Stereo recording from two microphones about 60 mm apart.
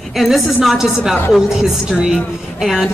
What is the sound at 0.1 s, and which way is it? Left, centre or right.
A woman's voice, centre.